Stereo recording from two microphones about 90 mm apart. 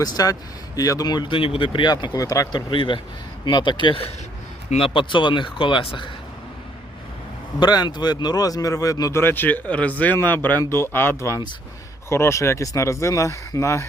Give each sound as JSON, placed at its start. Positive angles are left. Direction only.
{"t": 0.0, "sound": "speech", "side_deg": 45}
{"t": 2.2, "sound": "speech", "side_deg": 40}
{"t": 2.5, "sound": "speech", "side_deg": 60}
{"t": 4.8, "sound": "speech", "side_deg": 65}
{"t": 7.6, "sound": "speech", "side_deg": 50}
{"t": 9.2, "sound": "speech", "side_deg": 20}